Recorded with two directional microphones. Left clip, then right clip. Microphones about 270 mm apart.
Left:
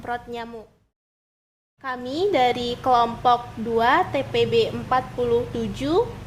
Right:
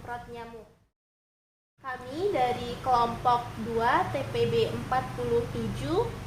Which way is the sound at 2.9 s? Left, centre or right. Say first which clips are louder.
Left 6 dB; left.